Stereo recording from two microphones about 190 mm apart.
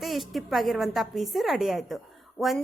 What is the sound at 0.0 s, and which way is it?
A woman's voice, centre (ahead or behind).